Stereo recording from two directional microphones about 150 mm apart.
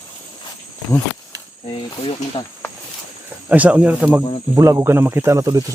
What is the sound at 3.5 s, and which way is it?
Speech, 10° right (ahead or behind).